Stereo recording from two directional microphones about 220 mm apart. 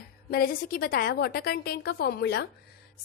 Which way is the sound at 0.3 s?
40° left (ahead or behind).